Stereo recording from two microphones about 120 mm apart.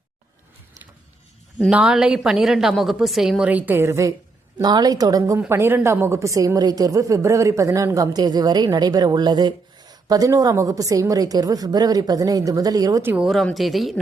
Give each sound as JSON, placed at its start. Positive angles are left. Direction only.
{"t": 1.7, "sound": "a woman's voice", "side_deg": -5}
{"t": 4.6, "sound": "a woman's voice", "side_deg": -35}
{"t": 13.0, "sound": "speech", "side_deg": -15}
{"t": 13.2, "sound": "a woman's voice", "side_deg": 0}